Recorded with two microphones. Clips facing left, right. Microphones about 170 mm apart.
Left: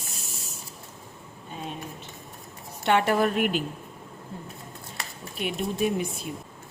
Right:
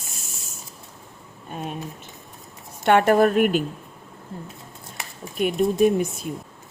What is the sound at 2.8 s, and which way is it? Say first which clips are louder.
Speech: right 6 dB; 50° right (ahead or behind).